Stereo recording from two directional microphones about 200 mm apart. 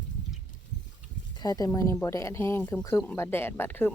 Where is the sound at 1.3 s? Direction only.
20° left (ahead or behind).